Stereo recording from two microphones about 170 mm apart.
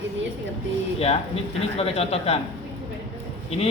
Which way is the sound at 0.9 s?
35° left (ahead or behind).